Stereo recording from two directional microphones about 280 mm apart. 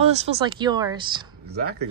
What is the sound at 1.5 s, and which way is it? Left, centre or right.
Speech, right.